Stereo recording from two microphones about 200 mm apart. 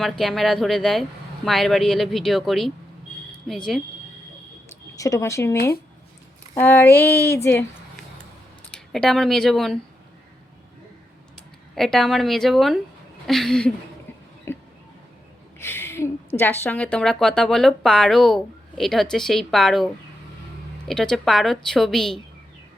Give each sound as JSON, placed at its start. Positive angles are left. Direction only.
{"t": 0.0, "sound": "a woman's voice", "side_deg": 0}
{"t": 4.9, "sound": "speech", "side_deg": 15}
{"t": 8.7, "sound": "speech", "side_deg": 0}
{"t": 11.7, "sound": "a woman's voice", "side_deg": 0}
{"t": 14.5, "sound": "a sound", "side_deg": 15}
{"t": 15.5, "sound": "a woman's voice", "side_deg": 10}